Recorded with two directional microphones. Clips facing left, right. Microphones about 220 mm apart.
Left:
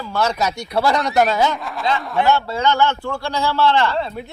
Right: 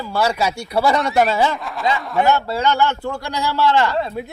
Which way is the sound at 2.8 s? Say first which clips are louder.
Left 1 dB; 15° right (ahead or behind).